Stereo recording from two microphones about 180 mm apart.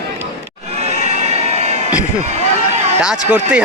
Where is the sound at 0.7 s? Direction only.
40° right (ahead or behind).